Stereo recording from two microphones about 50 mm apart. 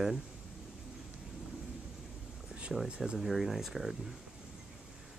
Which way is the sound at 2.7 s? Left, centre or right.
Centre.